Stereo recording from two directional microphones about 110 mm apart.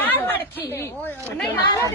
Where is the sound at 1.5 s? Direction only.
30° left (ahead or behind).